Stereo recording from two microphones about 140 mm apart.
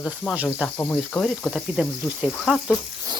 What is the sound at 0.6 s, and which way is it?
Speech, 10° left (ahead or behind).